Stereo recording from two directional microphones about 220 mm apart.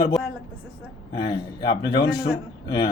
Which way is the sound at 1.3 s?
20° left (ahead or behind).